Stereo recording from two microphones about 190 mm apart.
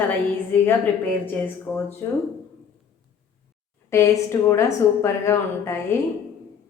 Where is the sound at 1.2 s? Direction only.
10° left (ahead or behind).